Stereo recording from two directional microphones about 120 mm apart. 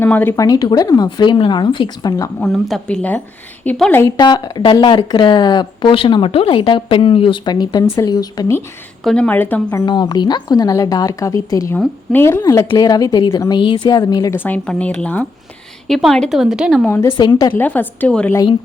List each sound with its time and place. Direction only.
0.0 s a woman's voice: 15° left (ahead or behind)
0.3 s speech: 30° left (ahead or behind)
2.4 s a woman's voice: centre (ahead or behind)
4.2 s speech: 35° left (ahead or behind)
9.0 s a woman's voice: 10° left (ahead or behind)
9.8 s speech: 35° left (ahead or behind); by 12.4 s 20° left (ahead or behind)
12.4 s speech: 30° left (ahead or behind)
14.3 s a woman's voice: 15° left (ahead or behind); by 16.8 s 5° right (ahead or behind)
16.8 s a woman's voice: 20° left (ahead or behind)